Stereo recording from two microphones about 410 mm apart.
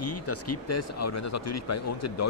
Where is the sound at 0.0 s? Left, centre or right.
Left.